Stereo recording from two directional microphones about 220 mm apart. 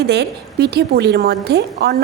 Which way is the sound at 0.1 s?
50° right (ahead or behind).